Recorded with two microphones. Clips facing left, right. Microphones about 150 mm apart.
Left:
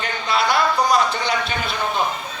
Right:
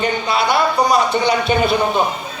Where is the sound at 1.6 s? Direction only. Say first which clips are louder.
Right 7 dB; 55° right (ahead or behind).